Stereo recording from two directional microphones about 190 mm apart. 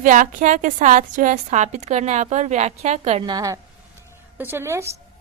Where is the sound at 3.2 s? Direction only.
20° right (ahead or behind).